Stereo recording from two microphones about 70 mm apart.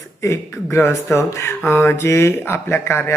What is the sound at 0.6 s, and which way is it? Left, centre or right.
Speech, left.